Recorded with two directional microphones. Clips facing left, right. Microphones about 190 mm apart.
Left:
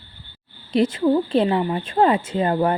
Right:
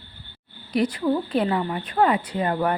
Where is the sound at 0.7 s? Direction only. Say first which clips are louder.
Left 4 dB; 25° left (ahead or behind).